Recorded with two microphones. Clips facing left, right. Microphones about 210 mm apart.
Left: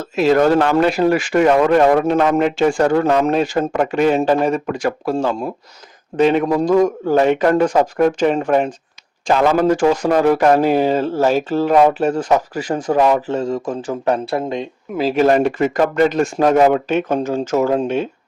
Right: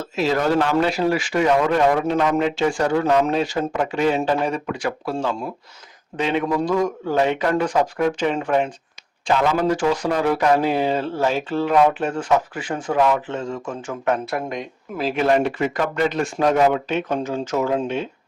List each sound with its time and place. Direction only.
0.0 s a man's voice: 55° left (ahead or behind); by 15.1 s 30° left (ahead or behind)
15.1 s speech: 40° left (ahead or behind)